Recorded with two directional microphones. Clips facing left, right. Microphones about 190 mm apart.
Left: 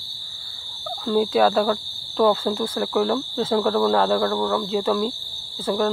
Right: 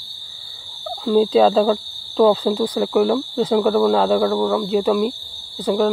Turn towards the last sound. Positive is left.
turn(degrees=-15)  # may be behind; listen again after turning